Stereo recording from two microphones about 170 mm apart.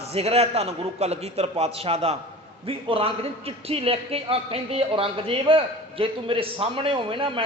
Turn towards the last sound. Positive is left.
turn(degrees=-30)  # may be behind; listen again after turning